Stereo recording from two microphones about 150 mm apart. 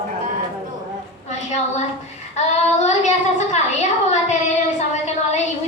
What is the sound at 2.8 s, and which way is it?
Speech, 50° left (ahead or behind).